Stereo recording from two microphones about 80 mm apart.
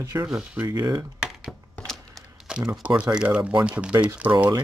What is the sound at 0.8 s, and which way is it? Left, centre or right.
Speech, right.